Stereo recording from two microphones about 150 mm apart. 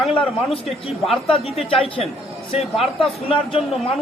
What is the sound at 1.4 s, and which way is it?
Speech, 40° left (ahead or behind).